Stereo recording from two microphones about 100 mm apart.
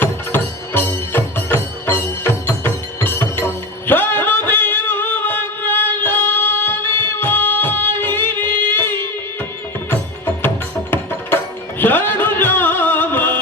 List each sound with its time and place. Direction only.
0.0 s music: 20° left (ahead or behind)
11.8 s music: 20° left (ahead or behind)